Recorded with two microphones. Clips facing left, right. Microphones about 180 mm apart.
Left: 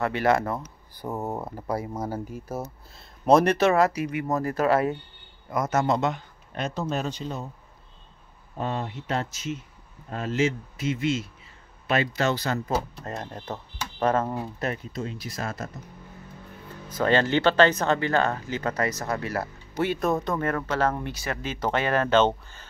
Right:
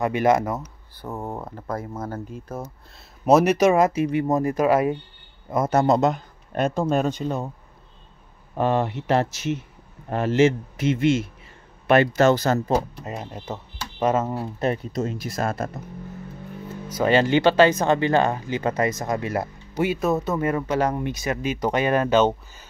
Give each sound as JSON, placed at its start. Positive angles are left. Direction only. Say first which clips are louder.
{"t": 0.0, "sound": "speech", "louder": "right 3 dB", "side_deg": -15}
{"t": 1.0, "sound": "speech", "louder": "left 1 dB", "side_deg": 10}
{"t": 3.3, "sound": "speech", "louder": "right 3 dB", "side_deg": -5}
{"t": 4.3, "sound": "speech", "louder": "right 1 dB", "side_deg": -15}
{"t": 5.5, "sound": "speech", "louder": "right 5 dB", "side_deg": -30}
{"t": 8.5, "sound": "speech", "louder": "right 8 dB", "side_deg": -70}
{"t": 11.9, "sound": "speech", "louder": "right 8 dB", "side_deg": -55}
{"t": 12.9, "sound": "speech", "louder": "right 2 dB", "side_deg": -10}
{"t": 14.6, "sound": "speech", "louder": "right 10 dB", "side_deg": -35}
{"t": 16.9, "sound": "speech", "louder": "right 3 dB", "side_deg": -10}
{"t": 19.7, "sound": "speech", "louder": "right 3 dB", "side_deg": -10}